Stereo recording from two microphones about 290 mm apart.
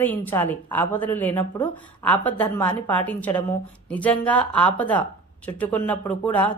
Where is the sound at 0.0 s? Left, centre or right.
Centre.